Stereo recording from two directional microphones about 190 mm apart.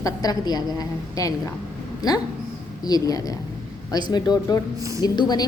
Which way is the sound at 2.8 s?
20° left (ahead or behind).